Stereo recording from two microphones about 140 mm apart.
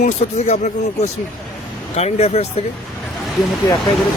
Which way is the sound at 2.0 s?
50° left (ahead or behind).